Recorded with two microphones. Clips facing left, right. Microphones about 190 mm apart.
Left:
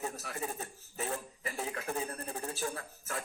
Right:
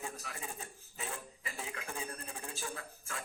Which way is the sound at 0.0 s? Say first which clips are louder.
Left 6 dB; 40° left (ahead or behind).